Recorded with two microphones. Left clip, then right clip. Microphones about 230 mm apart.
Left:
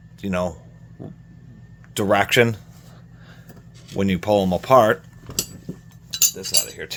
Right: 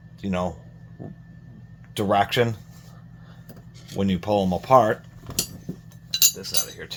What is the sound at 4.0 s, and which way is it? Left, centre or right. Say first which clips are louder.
Speech: left 4 dB; left.